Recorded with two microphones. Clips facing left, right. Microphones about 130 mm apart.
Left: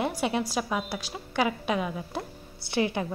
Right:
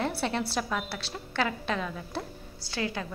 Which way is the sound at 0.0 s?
15° left (ahead or behind).